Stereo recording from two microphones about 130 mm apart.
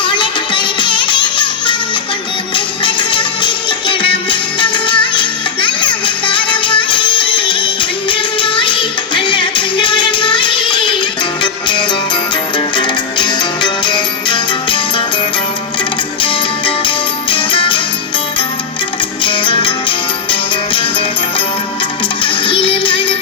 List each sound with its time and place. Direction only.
0.0 s music: 40° left (ahead or behind)
2.8 s music: 40° left (ahead or behind)
16.2 s music: 40° left (ahead or behind)
19.2 s music: 40° left (ahead or behind)
22.2 s music: 40° left (ahead or behind)